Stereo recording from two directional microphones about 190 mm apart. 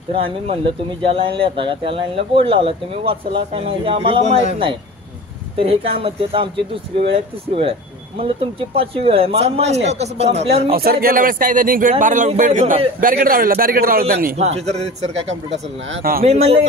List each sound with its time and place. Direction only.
0.1 s speech: 30° right (ahead or behind)
8.2 s speech: 30° right (ahead or behind)
10.7 s a man's voice: 50° right (ahead or behind)
14.4 s speech: 35° right (ahead or behind)
16.0 s a man's voice: 50° right (ahead or behind)
16.3 s speech: 35° right (ahead or behind)